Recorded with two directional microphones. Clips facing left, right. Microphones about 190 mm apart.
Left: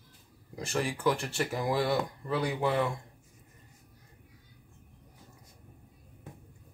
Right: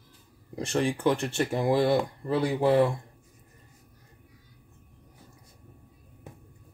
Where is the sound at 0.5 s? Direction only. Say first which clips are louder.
Right 5 dB; 25° right (ahead or behind).